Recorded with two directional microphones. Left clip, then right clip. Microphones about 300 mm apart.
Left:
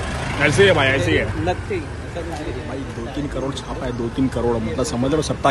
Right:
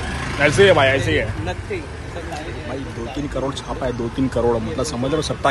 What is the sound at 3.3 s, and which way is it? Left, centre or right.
A man's voice, centre.